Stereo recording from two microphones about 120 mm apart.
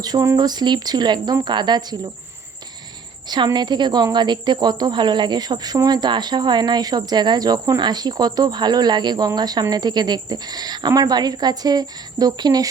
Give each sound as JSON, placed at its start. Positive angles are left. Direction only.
{"t": 0.0, "sound": "a woman's voice", "side_deg": -30}
{"t": 3.2, "sound": "a woman's voice", "side_deg": -35}